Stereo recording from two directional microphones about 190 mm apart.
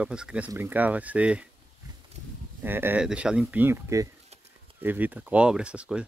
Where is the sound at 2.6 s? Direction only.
10° right (ahead or behind).